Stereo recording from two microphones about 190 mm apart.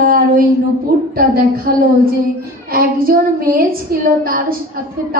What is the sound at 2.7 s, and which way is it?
A woman's voice, 50° right (ahead or behind).